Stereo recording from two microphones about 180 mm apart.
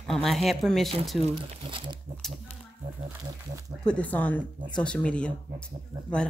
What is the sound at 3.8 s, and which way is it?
A woman's voice, 5° left (ahead or behind).